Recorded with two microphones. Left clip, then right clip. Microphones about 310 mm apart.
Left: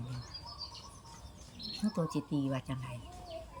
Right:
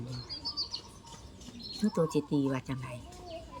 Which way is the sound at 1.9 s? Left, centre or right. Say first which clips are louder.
Right 8 dB; centre.